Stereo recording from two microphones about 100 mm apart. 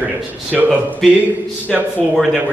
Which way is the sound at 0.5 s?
15° right (ahead or behind).